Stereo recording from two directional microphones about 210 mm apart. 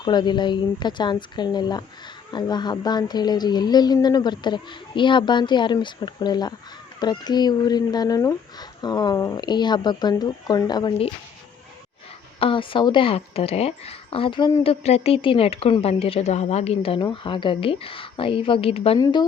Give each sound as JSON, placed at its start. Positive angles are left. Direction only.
{"t": 0.0, "sound": "speech", "side_deg": 20}
{"t": 12.4, "sound": "speech", "side_deg": 25}